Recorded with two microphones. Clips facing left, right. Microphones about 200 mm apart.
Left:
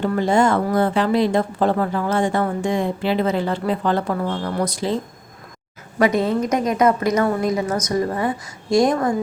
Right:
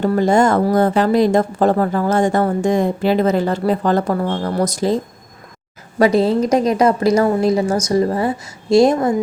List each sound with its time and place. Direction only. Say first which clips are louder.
0.0 s speech: right 3 dB; 45° right (ahead or behind)
6.0 s a woman's voice: right 4 dB; 30° right (ahead or behind)